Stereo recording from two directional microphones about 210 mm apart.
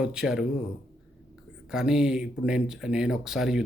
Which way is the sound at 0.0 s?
5° right (ahead or behind).